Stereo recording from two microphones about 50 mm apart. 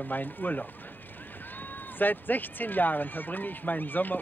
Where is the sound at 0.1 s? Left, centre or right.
Left.